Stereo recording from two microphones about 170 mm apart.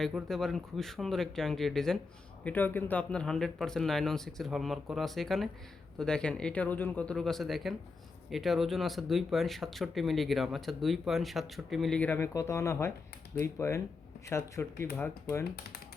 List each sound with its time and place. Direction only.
0.0 s speech: centre (ahead or behind)